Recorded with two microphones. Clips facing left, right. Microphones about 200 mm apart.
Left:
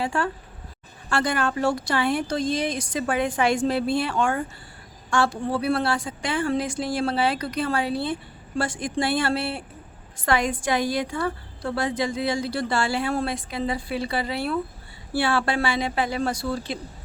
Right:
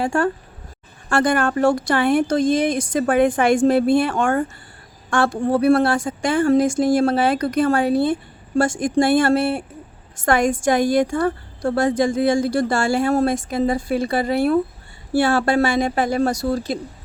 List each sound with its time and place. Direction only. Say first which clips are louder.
0.0 s a woman's voice: right 6 dB; 50° right (ahead or behind)